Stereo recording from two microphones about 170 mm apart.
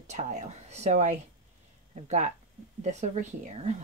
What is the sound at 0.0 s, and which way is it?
A woman's voice, 40° right (ahead or behind).